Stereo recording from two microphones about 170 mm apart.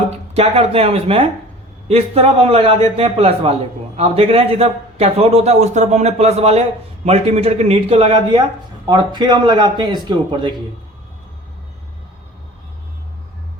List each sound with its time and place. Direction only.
0.1 s a man's voice: 35° right (ahead or behind)